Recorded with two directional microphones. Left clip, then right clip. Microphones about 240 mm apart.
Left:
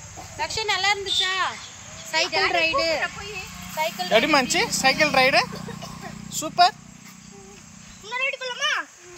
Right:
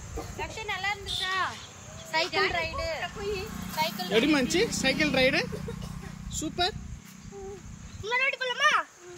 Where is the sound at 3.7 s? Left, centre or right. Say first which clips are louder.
Left 4 dB; left.